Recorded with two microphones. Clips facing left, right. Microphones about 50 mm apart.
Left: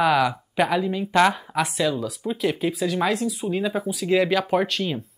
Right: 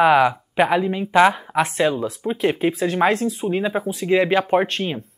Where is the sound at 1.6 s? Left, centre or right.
Right.